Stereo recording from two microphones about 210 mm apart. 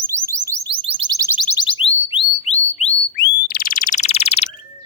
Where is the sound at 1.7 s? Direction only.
25° left (ahead or behind).